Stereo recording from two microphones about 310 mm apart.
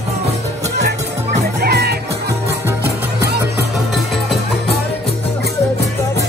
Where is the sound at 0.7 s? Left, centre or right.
Right.